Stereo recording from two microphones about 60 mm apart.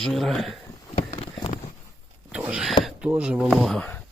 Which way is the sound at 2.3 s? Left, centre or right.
Centre.